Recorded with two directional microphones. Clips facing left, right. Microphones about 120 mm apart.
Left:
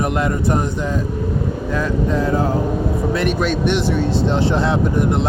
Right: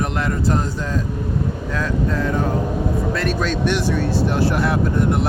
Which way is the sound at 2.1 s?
30° left (ahead or behind).